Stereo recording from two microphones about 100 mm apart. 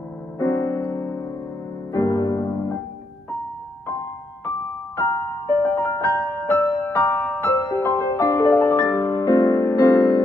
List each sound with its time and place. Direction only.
0.4 s music: 30° left (ahead or behind)
4.9 s music: 30° left (ahead or behind)